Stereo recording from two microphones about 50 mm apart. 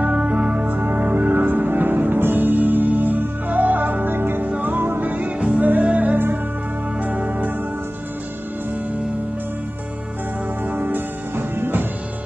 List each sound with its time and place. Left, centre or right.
0.0 s music: right
0.7 s music: right
4.5 s music: right
6.1 s music: right
7.0 s music: right
10.7 s music: right